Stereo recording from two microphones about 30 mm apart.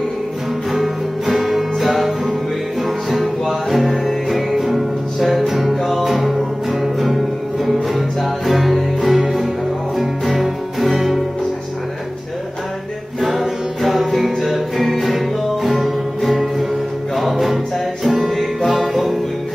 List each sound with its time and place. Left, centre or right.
0.7 s music: centre
13.2 s music: centre